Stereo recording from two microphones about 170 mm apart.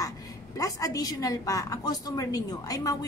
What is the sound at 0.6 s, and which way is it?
A woman's voice, 20° left (ahead or behind).